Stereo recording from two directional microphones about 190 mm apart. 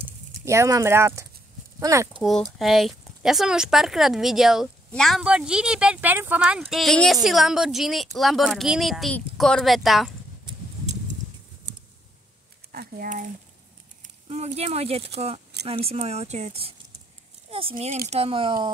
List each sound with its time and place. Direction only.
0.5 s speech: 15° right (ahead or behind)
2.6 s speech: centre (ahead or behind)
12.7 s speech: 50° right (ahead or behind)
14.0 s speech: 35° right (ahead or behind)